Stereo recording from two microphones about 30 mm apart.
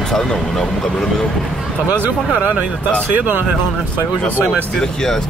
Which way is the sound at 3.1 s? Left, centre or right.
Right.